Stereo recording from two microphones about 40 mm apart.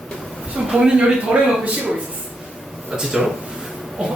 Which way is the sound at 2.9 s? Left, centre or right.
Centre.